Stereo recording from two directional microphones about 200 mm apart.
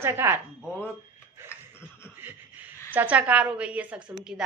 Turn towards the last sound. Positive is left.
turn(degrees=-5)  # may be behind; listen again after turning